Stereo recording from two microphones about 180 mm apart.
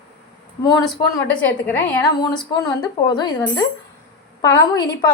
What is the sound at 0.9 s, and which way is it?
Speech, 5° left (ahead or behind).